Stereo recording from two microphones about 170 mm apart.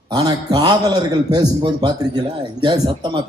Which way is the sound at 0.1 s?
25° right (ahead or behind).